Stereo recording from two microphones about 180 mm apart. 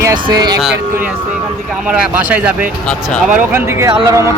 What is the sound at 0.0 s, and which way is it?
Speech, 20° right (ahead or behind).